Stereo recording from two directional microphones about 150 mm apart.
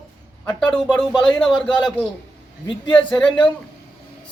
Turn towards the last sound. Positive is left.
turn(degrees=5)  # may be behind; listen again after turning